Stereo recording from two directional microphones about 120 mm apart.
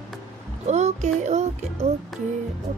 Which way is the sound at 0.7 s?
70° right (ahead or behind).